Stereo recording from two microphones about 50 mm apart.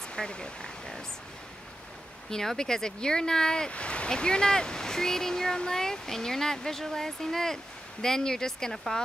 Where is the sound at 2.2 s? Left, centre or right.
Centre.